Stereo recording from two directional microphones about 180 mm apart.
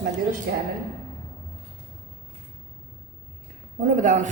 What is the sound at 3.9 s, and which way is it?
Speech, 45° right (ahead or behind).